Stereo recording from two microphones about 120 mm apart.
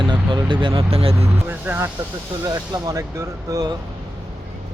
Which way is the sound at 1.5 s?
15° right (ahead or behind).